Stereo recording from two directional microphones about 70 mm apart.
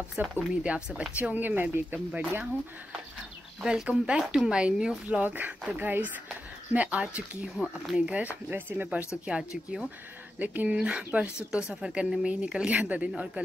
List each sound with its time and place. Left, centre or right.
0.2 s speech: centre
3.6 s speech: centre; by 9.0 s right
9.3 s speech: centre
10.4 s speech: right
10.8 s speech: centre